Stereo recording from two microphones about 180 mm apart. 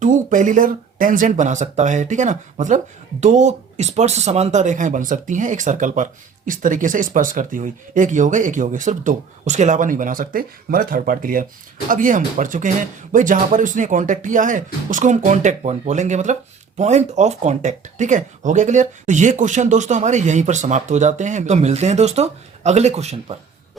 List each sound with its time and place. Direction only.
0.0 s speech: 45° right (ahead or behind)